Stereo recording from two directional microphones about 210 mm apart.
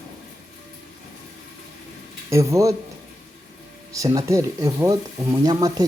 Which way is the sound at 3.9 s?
15° right (ahead or behind).